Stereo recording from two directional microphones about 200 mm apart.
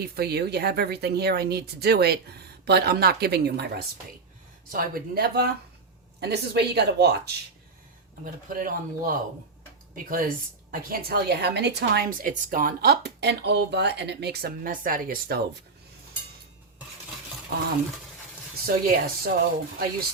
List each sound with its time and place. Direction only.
0.0 s a woman's voice: 50° right (ahead or behind)
8.2 s a woman's voice: 45° right (ahead or behind)
18.6 s a woman's voice: 50° right (ahead or behind)